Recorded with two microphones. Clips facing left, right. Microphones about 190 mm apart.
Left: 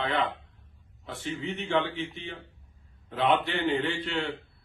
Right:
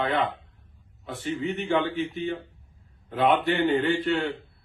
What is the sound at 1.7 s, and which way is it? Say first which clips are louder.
Speech: right 2 dB; 5° right (ahead or behind).